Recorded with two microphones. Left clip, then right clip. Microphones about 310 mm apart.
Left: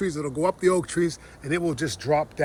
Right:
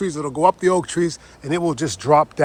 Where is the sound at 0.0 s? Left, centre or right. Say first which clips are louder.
Right 7 dB; centre.